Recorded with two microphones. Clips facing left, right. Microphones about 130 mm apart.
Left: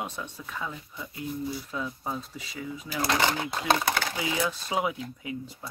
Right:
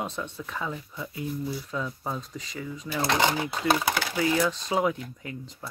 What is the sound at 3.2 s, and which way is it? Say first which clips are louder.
Speech: right 2 dB; 15° right (ahead or behind).